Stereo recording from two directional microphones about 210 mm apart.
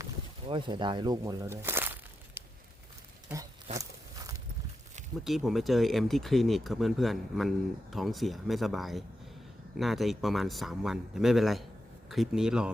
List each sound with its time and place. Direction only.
0.4 s speech: 25° right (ahead or behind)
3.3 s wild animals: 5° right (ahead or behind)
5.2 s speech: centre (ahead or behind)